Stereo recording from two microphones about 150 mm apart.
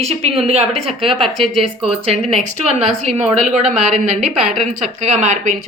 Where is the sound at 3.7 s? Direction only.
5° right (ahead or behind).